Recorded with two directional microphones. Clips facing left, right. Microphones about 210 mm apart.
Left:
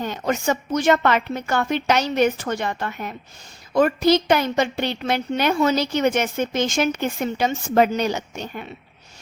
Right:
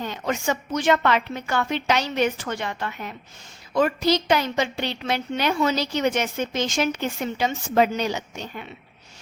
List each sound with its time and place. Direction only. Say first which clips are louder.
0.0 s a woman's voice: left 3 dB; 45° left (ahead or behind)